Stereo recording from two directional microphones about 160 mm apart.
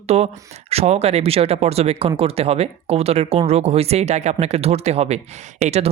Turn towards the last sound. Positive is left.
turn(degrees=-40)  # may be behind; listen again after turning